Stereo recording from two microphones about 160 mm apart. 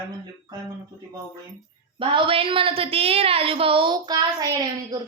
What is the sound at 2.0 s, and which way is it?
A woman's voice, 35° right (ahead or behind).